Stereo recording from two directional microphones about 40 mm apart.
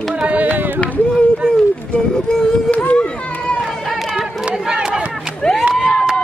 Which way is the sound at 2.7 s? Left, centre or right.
Left.